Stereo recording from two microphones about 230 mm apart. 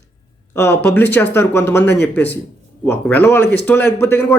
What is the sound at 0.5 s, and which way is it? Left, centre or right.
A man's voice, centre.